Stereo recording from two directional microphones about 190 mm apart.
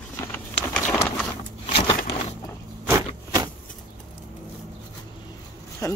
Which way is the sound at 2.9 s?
15° right (ahead or behind).